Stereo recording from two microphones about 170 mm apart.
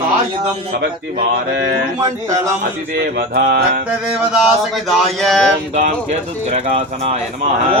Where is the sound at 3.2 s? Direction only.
70° right (ahead or behind).